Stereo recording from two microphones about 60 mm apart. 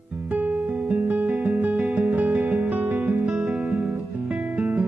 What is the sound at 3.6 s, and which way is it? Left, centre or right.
Guitar, centre.